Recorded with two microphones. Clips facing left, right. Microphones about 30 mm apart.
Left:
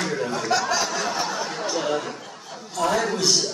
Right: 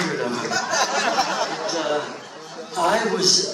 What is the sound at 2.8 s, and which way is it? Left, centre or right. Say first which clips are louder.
Speech: right 2 dB; centre.